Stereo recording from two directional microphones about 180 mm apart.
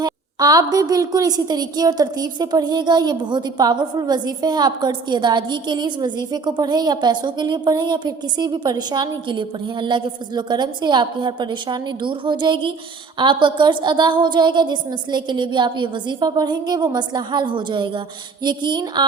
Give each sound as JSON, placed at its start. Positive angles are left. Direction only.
{"t": 0.0, "sound": "a woman's voice", "side_deg": -20}